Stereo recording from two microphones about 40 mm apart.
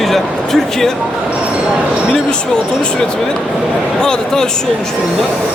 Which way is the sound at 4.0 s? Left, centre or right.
Centre.